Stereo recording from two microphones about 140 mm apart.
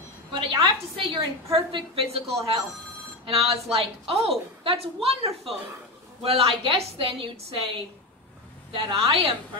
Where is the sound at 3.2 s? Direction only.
45° right (ahead or behind).